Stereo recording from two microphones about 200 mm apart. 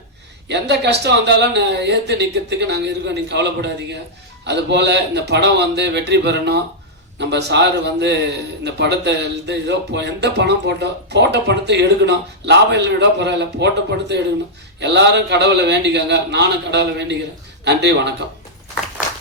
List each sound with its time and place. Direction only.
0.4 s a man's voice: 60° right (ahead or behind)
14.8 s a man's voice: 60° right (ahead or behind)